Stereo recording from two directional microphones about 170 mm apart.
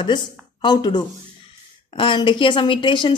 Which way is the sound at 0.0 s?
25° left (ahead or behind).